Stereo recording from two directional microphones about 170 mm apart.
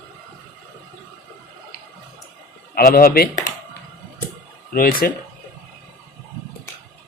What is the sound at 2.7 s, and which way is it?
Speech, 60° left (ahead or behind).